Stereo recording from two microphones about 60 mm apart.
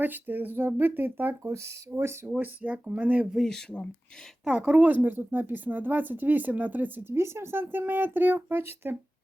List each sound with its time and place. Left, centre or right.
0.0 s a woman's voice: right
1.5 s speech: right
2.2 s speech: right
3.3 s speech: centre
4.4 s a woman's voice: centre; by 9.0 s right